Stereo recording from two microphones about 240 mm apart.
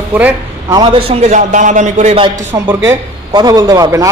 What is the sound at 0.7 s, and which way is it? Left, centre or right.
A man's voice, right.